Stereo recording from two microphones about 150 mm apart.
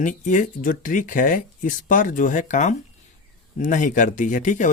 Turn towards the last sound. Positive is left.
turn(degrees=55)  # may be behind; listen again after turning